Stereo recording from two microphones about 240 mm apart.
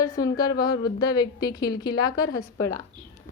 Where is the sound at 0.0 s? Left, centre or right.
Centre.